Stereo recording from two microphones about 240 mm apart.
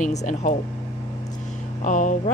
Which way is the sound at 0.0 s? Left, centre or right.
Left.